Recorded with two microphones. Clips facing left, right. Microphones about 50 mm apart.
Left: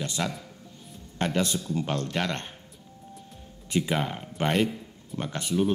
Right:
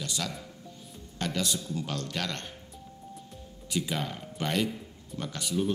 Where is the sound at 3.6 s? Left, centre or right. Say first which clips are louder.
Left 5 dB; left.